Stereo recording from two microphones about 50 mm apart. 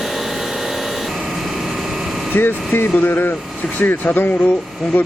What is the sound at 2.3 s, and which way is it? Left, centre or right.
Speech, left.